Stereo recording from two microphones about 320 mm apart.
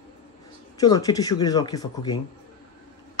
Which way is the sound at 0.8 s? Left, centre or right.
Centre.